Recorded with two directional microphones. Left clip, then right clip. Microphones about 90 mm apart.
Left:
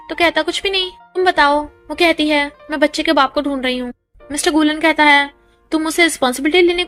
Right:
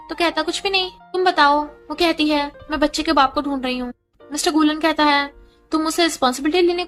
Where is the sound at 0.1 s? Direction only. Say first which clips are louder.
Left 5 dB; 40° left (ahead or behind).